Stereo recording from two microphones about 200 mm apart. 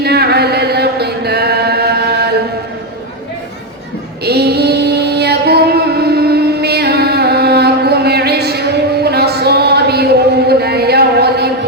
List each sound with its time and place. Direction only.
0.0 s chant: 55° right (ahead or behind)
4.2 s female singing: 55° right (ahead or behind)
9.0 s a sound: 55° right (ahead or behind)